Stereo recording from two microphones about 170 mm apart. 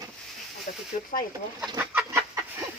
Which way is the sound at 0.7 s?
50° left (ahead or behind).